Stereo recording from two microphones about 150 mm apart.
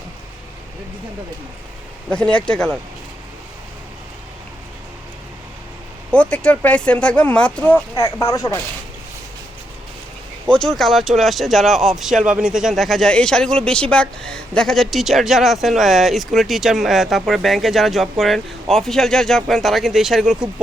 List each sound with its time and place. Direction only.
2.0 s speech: 5° left (ahead or behind)
6.1 s speech: 10° left (ahead or behind)
7.9 s speech: 20° left (ahead or behind)
10.5 s speech: 5° left (ahead or behind)